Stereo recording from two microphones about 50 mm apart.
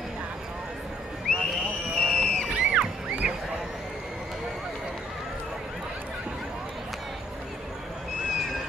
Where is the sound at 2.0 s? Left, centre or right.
Centre.